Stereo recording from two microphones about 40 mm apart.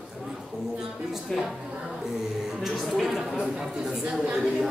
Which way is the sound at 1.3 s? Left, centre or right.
Centre.